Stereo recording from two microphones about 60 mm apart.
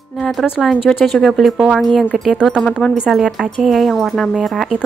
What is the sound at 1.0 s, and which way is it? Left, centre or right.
Speech, centre.